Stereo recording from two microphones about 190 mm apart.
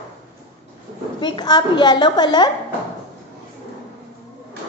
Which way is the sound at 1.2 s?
20° left (ahead or behind).